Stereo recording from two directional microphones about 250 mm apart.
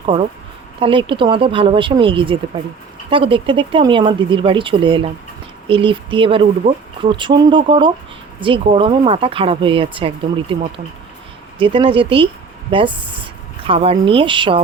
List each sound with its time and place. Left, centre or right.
0.8 s speech: centre
11.6 s speech: right